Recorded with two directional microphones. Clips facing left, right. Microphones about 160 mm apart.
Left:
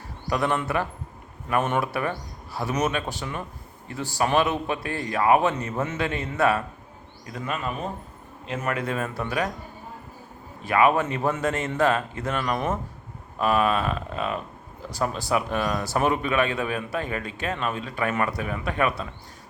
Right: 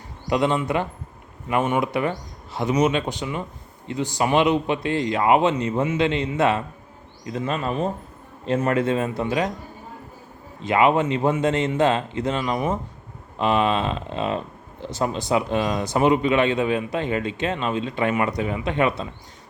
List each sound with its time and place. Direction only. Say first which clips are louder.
0.3 s speech: right 4 dB; 20° right (ahead or behind)
10.6 s speech: right 2 dB; 20° right (ahead or behind)